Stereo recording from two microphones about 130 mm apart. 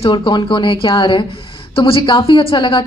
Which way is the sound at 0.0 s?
35° left (ahead or behind).